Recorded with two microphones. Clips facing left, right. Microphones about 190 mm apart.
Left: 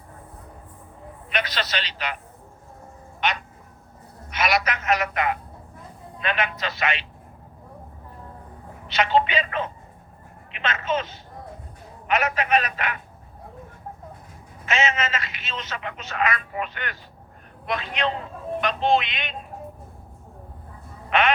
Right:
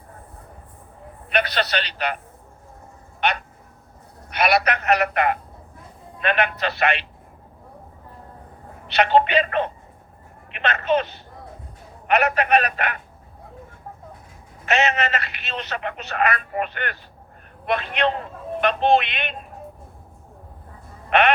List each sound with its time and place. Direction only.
1.3 s speech: 60° right (ahead or behind)
4.3 s speech: 60° right (ahead or behind)
8.9 s speech: 60° right (ahead or behind)
10.5 s a sound: 60° right (ahead or behind)
10.8 s speech: 60° right (ahead or behind)
14.7 s speech: 60° right (ahead or behind)
21.1 s music: 60° right (ahead or behind)